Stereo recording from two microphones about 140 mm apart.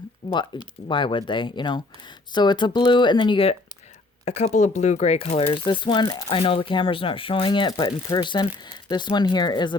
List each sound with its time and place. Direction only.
0.2 s a sound: 35° left (ahead or behind)
0.9 s speech: 35° left (ahead or behind)
4.3 s speech: 55° left (ahead or behind); by 6.4 s 30° left (ahead or behind)
6.4 s speech: 40° left (ahead or behind)